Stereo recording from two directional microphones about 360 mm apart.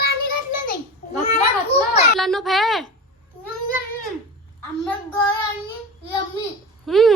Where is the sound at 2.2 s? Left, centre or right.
Centre.